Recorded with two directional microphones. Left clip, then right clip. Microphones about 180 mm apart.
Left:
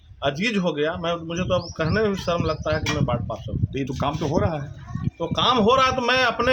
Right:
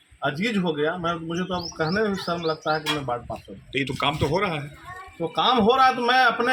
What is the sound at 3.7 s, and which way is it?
Speech, 45° left (ahead or behind).